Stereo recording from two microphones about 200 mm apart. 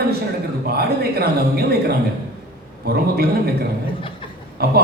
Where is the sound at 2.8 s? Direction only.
50° right (ahead or behind).